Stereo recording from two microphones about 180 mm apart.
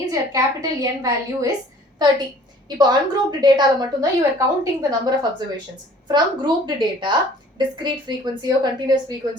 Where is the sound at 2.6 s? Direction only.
25° right (ahead or behind).